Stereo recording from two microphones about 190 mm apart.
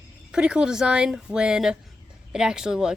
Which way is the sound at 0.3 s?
5° right (ahead or behind).